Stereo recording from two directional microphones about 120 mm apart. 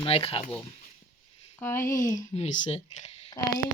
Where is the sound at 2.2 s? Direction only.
75° left (ahead or behind).